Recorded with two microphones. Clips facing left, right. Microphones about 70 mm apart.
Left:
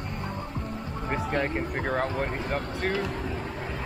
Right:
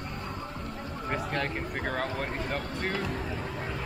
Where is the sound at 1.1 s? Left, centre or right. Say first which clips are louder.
Left 4 dB; centre.